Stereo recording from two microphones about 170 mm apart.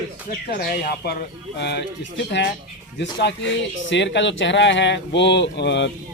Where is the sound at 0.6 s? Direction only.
60° left (ahead or behind).